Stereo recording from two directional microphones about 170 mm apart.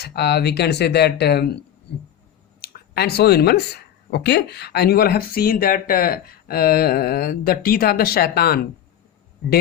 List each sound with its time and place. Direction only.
0.0 s speech: 70° left (ahead or behind)
2.6 s speech: 65° left (ahead or behind)